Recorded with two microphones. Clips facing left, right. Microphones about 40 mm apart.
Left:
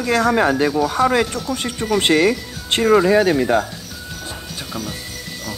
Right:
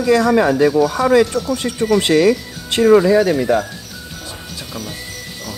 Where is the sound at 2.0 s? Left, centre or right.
Left.